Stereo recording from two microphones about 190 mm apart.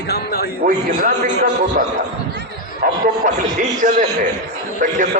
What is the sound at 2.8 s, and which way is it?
A man's voice, 45° right (ahead or behind).